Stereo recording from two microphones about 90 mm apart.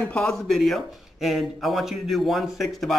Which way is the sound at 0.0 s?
10° left (ahead or behind).